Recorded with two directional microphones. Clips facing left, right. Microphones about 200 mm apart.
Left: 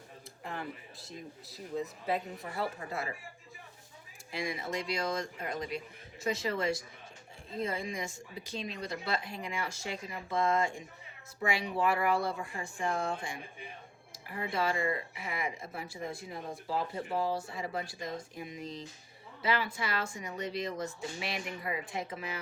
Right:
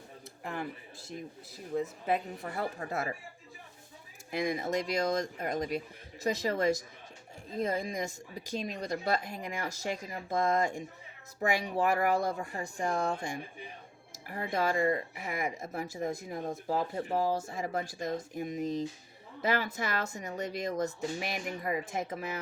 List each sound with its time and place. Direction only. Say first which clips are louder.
2.0 s speech: right 2 dB; 50° right (ahead or behind)
4.3 s speech: right 5 dB; 50° right (ahead or behind)